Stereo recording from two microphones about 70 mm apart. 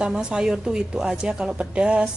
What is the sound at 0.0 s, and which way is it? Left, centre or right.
A woman's voice, centre.